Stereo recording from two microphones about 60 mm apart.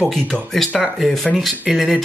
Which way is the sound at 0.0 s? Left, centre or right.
Centre.